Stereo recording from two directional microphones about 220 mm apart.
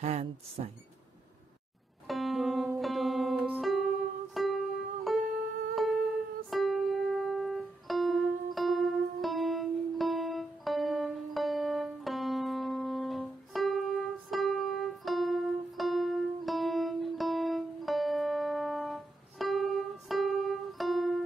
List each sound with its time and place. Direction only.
0.0 s speech: 30° right (ahead or behind)
2.0 s music: centre (ahead or behind)
6.5 s music: centre (ahead or behind)